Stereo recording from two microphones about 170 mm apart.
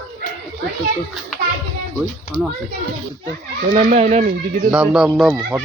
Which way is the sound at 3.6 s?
50° right (ahead or behind).